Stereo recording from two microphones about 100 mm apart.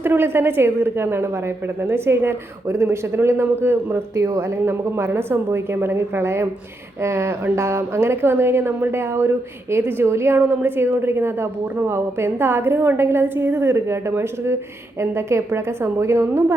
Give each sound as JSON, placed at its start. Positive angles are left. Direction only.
{"t": 0.0, "sound": "a woman's voice", "side_deg": -20}